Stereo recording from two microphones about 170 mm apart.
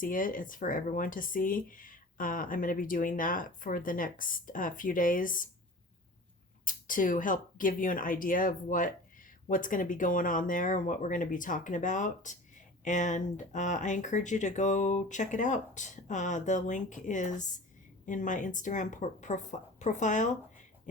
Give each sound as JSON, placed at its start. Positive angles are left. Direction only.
{"t": 0.0, "sound": "speech", "side_deg": 55}
{"t": 6.7, "sound": "speech", "side_deg": 50}